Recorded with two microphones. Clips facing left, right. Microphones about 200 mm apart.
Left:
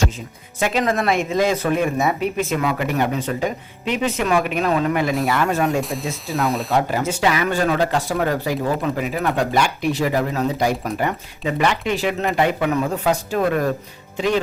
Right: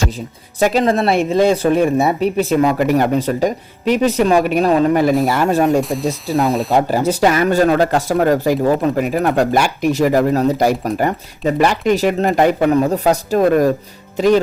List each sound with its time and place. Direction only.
0.6 s speech: 35° right (ahead or behind)
5.8 s speech: centre (ahead or behind)
6.7 s speech: 35° right (ahead or behind)